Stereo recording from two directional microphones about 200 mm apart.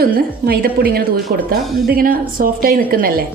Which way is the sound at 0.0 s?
50° right (ahead or behind).